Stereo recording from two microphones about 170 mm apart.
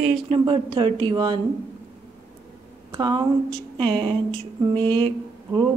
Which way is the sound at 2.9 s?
25° right (ahead or behind).